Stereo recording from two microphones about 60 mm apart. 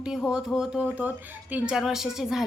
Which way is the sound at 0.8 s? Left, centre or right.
Right.